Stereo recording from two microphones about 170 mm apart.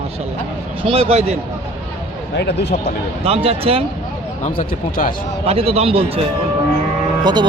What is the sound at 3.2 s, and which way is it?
Speech, 35° right (ahead or behind).